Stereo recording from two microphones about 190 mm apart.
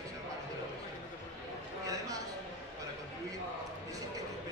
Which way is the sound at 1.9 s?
20° right (ahead or behind).